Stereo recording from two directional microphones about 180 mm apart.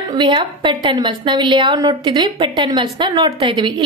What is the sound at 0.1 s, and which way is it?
A woman's voice, 25° right (ahead or behind).